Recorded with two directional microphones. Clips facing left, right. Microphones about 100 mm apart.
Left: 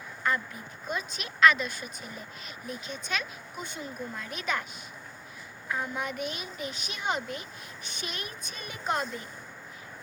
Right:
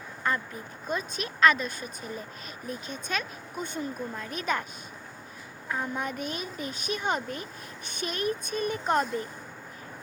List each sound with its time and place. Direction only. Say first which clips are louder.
0.3 s speech: even; 35° right (ahead or behind)
5.6 s speech: right 1 dB; 35° right (ahead or behind)